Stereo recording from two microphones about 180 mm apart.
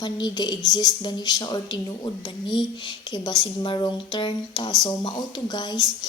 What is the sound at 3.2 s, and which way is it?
Speech, 25° left (ahead or behind).